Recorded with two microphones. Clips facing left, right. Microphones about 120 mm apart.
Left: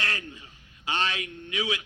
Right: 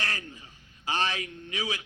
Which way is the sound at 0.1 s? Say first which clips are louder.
Left 2 dB; 30° right (ahead or behind).